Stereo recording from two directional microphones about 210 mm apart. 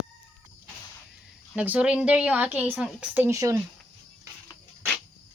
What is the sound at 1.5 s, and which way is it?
A woman's voice, 5° right (ahead or behind).